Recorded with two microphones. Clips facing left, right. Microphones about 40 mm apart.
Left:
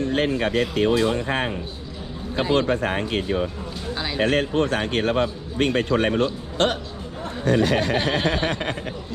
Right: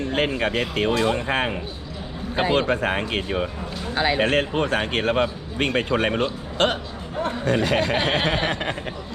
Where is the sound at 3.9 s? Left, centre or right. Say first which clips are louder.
Right 2 dB; right.